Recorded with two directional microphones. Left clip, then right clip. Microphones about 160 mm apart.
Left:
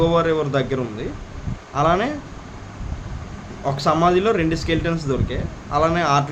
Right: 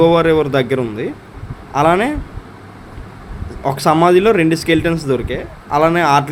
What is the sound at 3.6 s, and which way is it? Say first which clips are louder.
Speech: right 5 dB; 35° right (ahead or behind).